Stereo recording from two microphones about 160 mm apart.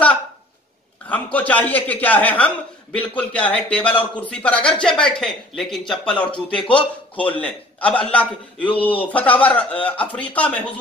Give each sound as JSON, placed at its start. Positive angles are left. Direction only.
{"t": 1.0, "sound": "a man's voice", "side_deg": 10}